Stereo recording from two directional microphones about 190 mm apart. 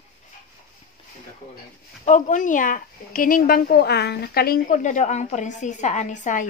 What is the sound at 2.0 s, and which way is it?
Speech, 40° left (ahead or behind).